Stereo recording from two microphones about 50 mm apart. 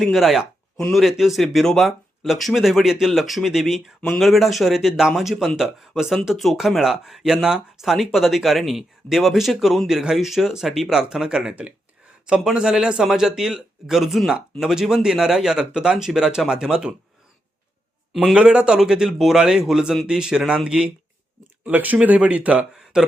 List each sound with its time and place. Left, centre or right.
0.0 s speech: centre
18.3 s speech: centre
21.6 s speech: right
22.9 s speech: centre